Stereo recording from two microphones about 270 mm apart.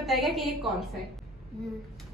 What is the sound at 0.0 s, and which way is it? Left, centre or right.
Speech, centre.